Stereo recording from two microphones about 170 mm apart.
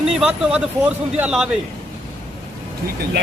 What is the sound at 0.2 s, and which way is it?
Speech, 5° right (ahead or behind).